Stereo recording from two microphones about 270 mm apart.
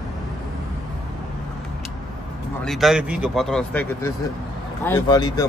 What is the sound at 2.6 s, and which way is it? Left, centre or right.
Speech, centre.